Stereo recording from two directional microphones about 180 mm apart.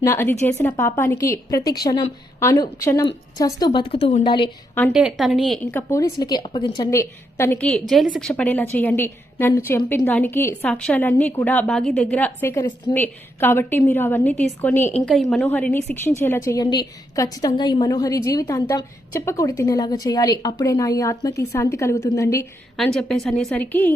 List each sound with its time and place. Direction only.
0.0 s a woman's voice: 15° left (ahead or behind)
4.9 s a woman's voice: centre (ahead or behind)
5.7 s a woman's voice: 20° left (ahead or behind)
7.7 s a woman's voice: centre (ahead or behind); by 22.4 s 20° left (ahead or behind)
22.8 s a woman's voice: centre (ahead or behind)